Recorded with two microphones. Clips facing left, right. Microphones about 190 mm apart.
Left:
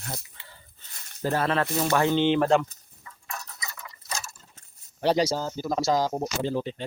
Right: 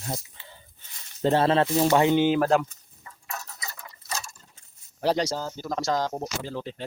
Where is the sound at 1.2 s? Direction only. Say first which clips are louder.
Right 4 dB; 25° right (ahead or behind).